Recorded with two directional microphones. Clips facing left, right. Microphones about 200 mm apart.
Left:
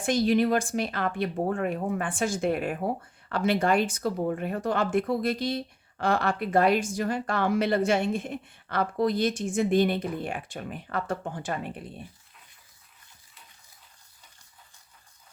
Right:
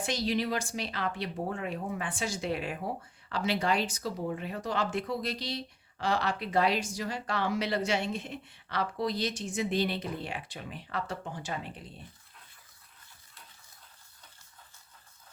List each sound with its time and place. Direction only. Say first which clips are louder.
0.0 s speech: left 8 dB; 50° left (ahead or behind)